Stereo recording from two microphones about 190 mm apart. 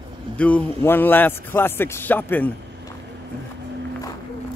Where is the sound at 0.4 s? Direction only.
5° left (ahead or behind).